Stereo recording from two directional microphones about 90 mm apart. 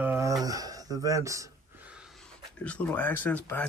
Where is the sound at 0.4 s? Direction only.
40° right (ahead or behind).